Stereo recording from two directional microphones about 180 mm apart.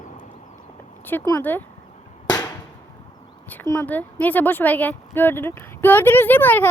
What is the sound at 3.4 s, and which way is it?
A woman's voice, 10° left (ahead or behind).